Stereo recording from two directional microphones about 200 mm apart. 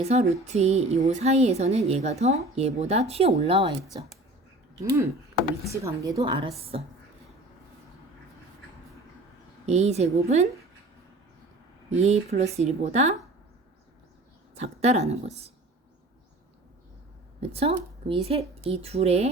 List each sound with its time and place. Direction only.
0.0 s speech: 35° right (ahead or behind)
4.8 s a woman's voice: 15° right (ahead or behind)
9.6 s speech: 35° right (ahead or behind)
11.9 s speech: 35° right (ahead or behind)
14.5 s speech: 35° right (ahead or behind)
17.4 s a woman's voice: 30° right (ahead or behind)